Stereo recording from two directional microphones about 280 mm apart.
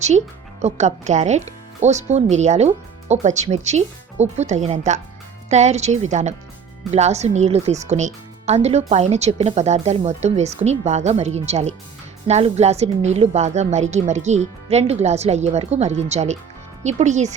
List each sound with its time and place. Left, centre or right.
0.6 s speech: right